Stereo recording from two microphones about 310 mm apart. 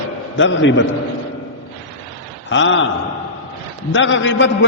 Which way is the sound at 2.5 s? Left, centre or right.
Left.